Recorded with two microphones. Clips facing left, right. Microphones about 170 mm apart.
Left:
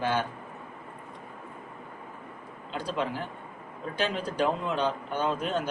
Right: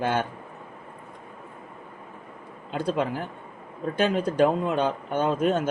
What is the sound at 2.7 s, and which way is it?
Speech, 50° right (ahead or behind).